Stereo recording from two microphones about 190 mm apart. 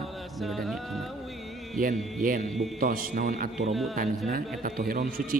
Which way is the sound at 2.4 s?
Centre (ahead or behind).